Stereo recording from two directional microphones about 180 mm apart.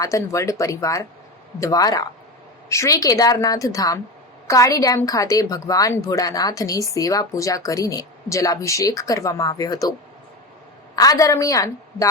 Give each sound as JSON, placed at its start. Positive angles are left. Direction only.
{"t": 0.0, "sound": "a woman's voice", "side_deg": 15}
{"t": 10.9, "sound": "a woman's voice", "side_deg": 20}